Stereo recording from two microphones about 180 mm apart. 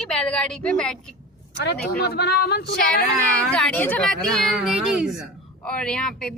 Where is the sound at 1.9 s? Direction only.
60° left (ahead or behind).